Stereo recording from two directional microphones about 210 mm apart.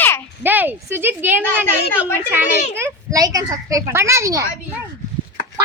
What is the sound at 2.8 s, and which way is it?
A child's voice, 15° right (ahead or behind).